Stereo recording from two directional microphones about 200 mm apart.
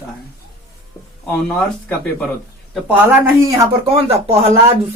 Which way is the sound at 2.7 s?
10° right (ahead or behind).